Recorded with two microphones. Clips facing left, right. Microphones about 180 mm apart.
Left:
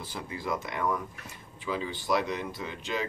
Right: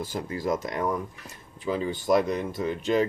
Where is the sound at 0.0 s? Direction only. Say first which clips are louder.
Right 7 dB; 45° right (ahead or behind).